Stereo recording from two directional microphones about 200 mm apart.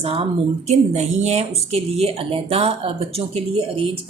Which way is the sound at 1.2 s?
35° right (ahead or behind).